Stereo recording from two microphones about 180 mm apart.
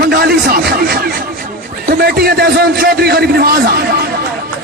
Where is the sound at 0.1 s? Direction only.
60° right (ahead or behind).